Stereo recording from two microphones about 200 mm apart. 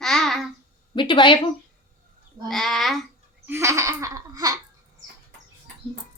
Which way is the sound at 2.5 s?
Centre (ahead or behind).